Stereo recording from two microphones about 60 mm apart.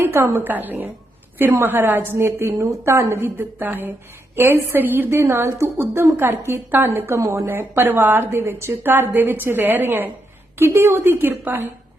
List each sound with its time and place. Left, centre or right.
0.0 s a woman's voice: right
2.1 s a woman's voice: right
5.2 s a woman's voice: right
5.7 s a woman's voice: right
7.2 s a woman's voice: right
10.6 s a woman's voice: right